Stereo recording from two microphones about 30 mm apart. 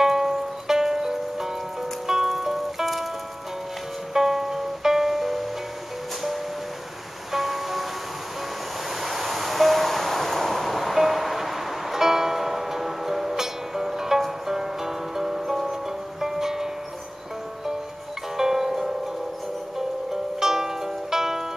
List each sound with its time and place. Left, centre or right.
0.0 s music: centre
4.1 s music: centre
7.3 s music: centre
9.0 s music: centre
18.4 s music: centre
20.3 s music: centre